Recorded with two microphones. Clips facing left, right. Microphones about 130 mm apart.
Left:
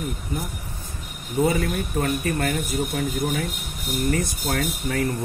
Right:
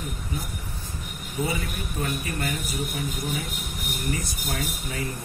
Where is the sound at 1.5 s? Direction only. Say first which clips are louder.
Left 7 dB; 55° left (ahead or behind).